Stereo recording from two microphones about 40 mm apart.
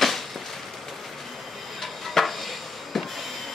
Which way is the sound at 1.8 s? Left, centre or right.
Centre.